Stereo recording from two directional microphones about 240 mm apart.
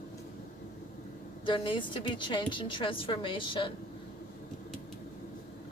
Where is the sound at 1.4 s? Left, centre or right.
Left.